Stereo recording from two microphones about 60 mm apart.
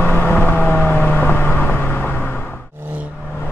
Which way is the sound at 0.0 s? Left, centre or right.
Left.